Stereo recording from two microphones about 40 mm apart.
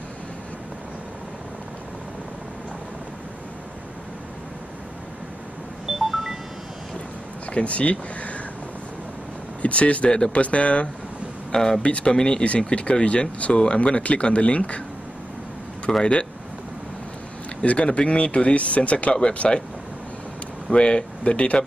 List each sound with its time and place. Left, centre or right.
5.9 s music: centre
7.4 s speech: left
9.6 s speech: left
11.5 s speech: centre
11.8 s speech: left
16.0 s speech: left
17.6 s speech: left
20.7 s speech: left